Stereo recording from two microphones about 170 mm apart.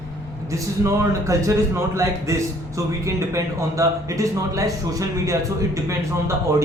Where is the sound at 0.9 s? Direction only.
20° right (ahead or behind).